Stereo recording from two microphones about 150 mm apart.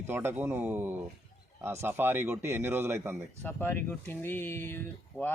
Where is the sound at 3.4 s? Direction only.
15° left (ahead or behind).